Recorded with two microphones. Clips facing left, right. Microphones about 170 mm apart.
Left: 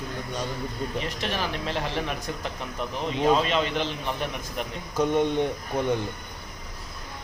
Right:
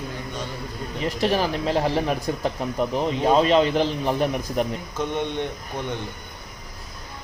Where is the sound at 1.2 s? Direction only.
35° right (ahead or behind).